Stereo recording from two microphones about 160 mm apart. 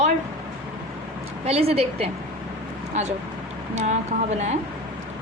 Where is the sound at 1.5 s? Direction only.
40° right (ahead or behind).